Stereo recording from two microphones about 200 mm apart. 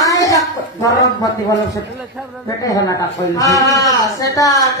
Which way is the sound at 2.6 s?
15° left (ahead or behind).